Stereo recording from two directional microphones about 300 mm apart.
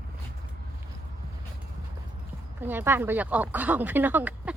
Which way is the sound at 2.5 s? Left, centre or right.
Centre.